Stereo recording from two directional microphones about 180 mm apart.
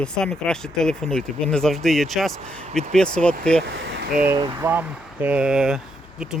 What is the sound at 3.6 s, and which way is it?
Speech, 90° right.